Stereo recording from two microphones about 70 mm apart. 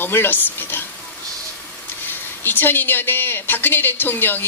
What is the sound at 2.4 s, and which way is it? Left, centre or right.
A woman's voice, left.